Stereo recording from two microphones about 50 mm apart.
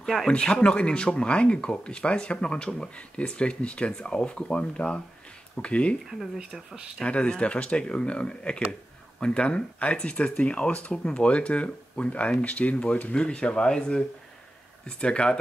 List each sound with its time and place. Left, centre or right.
0.0 s speech: centre
0.3 s speech: left
6.0 s speech: centre
7.0 s speech: left